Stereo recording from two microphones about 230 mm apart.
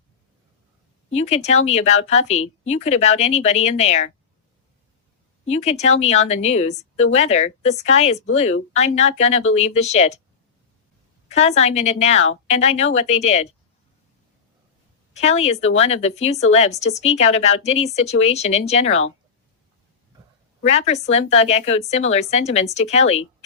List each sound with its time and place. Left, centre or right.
1.1 s a woman's voice: left
5.5 s a woman's voice: left
11.3 s a woman's voice: left
15.1 s a woman's voice: left
20.7 s a woman's voice: left